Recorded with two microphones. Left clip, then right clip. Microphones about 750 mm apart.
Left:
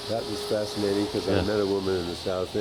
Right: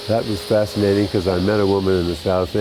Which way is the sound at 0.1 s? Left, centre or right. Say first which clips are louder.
Right 10 dB; right.